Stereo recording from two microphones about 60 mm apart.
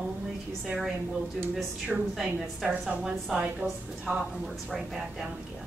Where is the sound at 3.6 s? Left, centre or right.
Centre.